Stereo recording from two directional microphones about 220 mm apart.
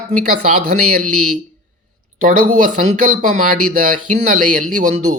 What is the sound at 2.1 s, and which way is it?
Speech, 35° right (ahead or behind).